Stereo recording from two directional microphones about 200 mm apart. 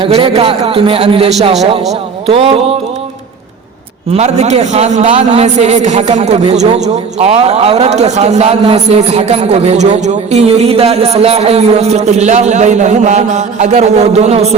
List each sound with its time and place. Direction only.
0.0 s a man's voice: 30° right (ahead or behind)
4.1 s a man's voice: 35° right (ahead or behind)